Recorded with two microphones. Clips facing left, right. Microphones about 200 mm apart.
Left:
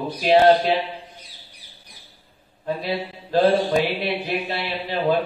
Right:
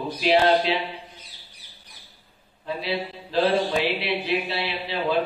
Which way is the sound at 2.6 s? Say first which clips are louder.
Left 2 dB; 45° left (ahead or behind).